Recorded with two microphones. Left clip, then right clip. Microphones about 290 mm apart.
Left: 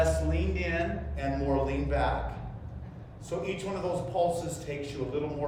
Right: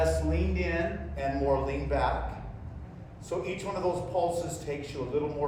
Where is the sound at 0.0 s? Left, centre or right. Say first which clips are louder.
Even; centre.